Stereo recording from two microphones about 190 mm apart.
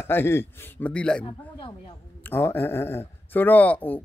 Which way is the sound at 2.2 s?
10° left (ahead or behind).